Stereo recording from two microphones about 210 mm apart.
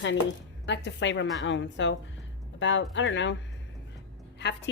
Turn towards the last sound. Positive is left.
turn(degrees=55)  # may be behind; listen again after turning